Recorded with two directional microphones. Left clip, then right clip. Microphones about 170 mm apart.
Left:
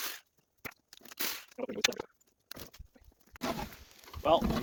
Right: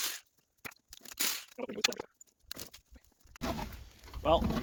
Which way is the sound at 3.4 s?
40° left (ahead or behind).